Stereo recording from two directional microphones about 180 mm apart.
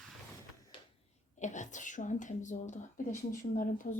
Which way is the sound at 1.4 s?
45° left (ahead or behind).